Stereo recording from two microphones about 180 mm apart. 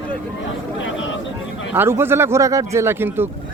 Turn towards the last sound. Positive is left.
turn(degrees=-10)  # may be behind; listen again after turning